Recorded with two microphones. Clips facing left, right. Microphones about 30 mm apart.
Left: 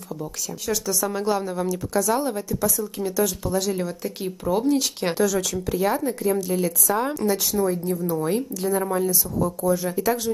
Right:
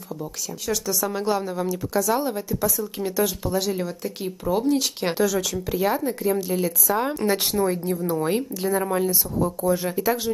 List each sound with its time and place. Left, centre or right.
0.7 s speech: centre
7.2 s speech: right; by 10.3 s centre